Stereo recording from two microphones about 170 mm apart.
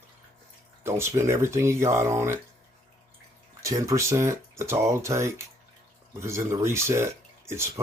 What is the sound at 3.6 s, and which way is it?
Speech, 20° right (ahead or behind).